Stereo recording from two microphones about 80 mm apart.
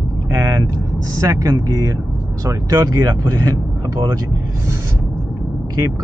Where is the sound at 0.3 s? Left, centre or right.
Right.